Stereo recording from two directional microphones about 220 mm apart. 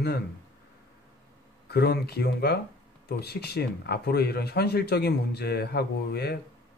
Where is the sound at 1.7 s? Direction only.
45° left (ahead or behind).